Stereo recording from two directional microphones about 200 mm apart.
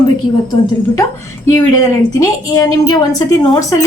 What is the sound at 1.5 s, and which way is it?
A woman's voice, 15° left (ahead or behind).